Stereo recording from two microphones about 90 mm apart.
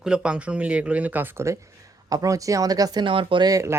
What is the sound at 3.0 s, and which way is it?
Speech, 70° right (ahead or behind).